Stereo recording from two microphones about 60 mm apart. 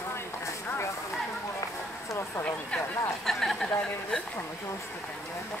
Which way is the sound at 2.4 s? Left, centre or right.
Left.